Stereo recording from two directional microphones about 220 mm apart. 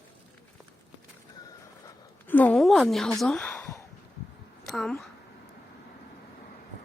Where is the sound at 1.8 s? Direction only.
10° left (ahead or behind).